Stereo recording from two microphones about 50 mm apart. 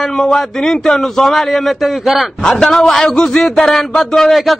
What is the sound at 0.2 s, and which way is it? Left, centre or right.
A man's voice, centre.